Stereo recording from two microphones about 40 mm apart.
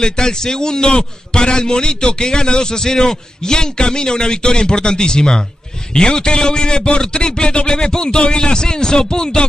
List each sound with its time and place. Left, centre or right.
0.0 s a man's voice: centre